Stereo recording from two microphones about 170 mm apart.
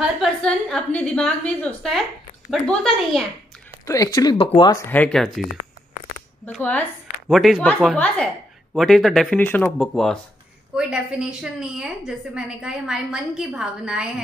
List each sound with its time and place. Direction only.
0.0 s a woman's voice: centre (ahead or behind)
3.8 s speech: 20° left (ahead or behind)
4.9 s speech: 10° left (ahead or behind)
6.6 s a woman's voice: 10° left (ahead or behind)